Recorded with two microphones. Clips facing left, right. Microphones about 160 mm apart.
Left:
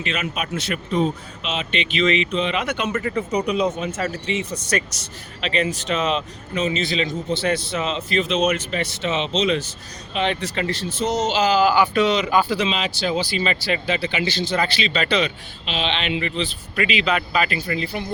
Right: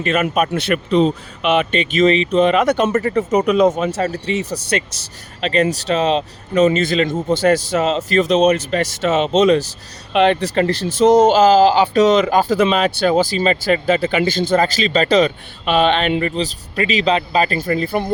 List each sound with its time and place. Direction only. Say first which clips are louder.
0.0 s speech: right 9 dB; 50° right (ahead or behind)
1.7 s speech: right 6 dB; 45° right (ahead or behind)
3.8 s speech: right 6 dB; 40° right (ahead or behind)
10.8 s speech: right 14 dB; 90° right
11.2 s speech: right 5 dB; 50° right (ahead or behind)
11.6 s speech: right 5 dB; 30° right (ahead or behind)
12.0 s speech: right 6 dB; 45° right (ahead or behind)